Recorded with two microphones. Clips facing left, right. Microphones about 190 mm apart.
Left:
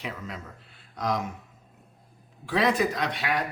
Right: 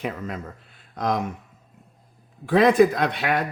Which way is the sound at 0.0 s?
50° right (ahead or behind).